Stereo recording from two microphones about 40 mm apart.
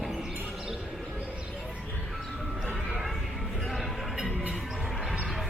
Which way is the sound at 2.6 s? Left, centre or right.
Centre.